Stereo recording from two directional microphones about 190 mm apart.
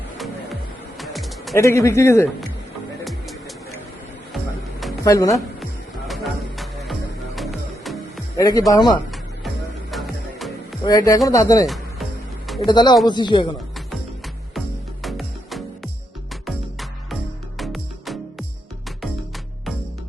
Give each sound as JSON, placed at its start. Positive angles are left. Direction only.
{"t": 0.9, "sound": "music", "side_deg": 0}
{"t": 1.5, "sound": "speech", "side_deg": 15}
{"t": 3.0, "sound": "music", "side_deg": 0}
{"t": 5.0, "sound": "speech", "side_deg": 15}
{"t": 7.3, "sound": "music", "side_deg": 0}
{"t": 8.4, "sound": "speech", "side_deg": 20}
{"t": 9.9, "sound": "music", "side_deg": 0}
{"t": 10.8, "sound": "a man's voice", "side_deg": 20}
{"t": 11.6, "sound": "music", "side_deg": 0}
{"t": 12.6, "sound": "a man's voice", "side_deg": 20}
{"t": 15.0, "sound": "music", "side_deg": 0}
{"t": 17.6, "sound": "music", "side_deg": 0}